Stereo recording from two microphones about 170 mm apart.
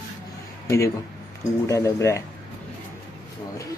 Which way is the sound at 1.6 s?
15° left (ahead or behind).